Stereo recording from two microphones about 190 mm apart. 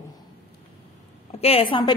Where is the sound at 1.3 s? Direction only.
30° left (ahead or behind).